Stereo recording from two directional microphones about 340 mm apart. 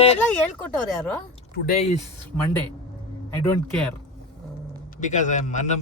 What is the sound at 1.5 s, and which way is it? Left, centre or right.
Speech, left.